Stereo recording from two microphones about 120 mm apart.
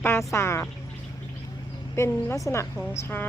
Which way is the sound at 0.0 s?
20° left (ahead or behind).